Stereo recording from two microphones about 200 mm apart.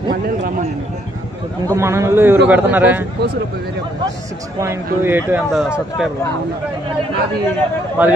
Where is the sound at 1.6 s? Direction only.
15° right (ahead or behind).